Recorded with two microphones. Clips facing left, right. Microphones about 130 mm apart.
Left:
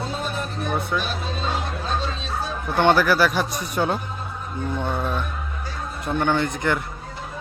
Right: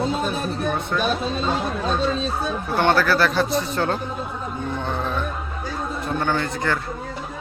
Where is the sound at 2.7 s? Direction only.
15° left (ahead or behind).